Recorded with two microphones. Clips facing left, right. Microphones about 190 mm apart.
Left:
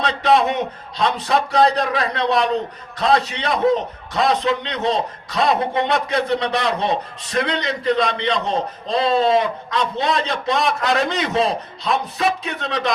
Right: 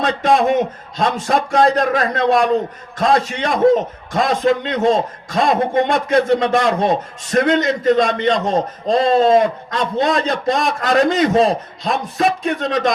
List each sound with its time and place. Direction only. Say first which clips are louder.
0.0 s a man's voice: right 2 dB; 45° right (ahead or behind)